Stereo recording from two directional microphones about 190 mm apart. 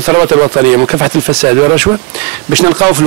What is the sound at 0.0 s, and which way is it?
Speech, 15° right (ahead or behind).